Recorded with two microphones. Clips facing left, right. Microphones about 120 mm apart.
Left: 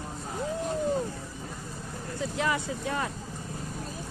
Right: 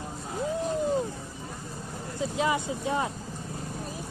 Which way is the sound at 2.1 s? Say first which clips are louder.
Right 2 dB; 20° right (ahead or behind).